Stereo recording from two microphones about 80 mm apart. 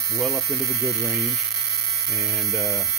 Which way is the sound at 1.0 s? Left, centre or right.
Centre.